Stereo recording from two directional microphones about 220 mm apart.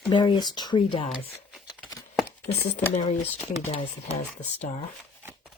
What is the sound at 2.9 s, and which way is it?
Speech, 30° left (ahead or behind).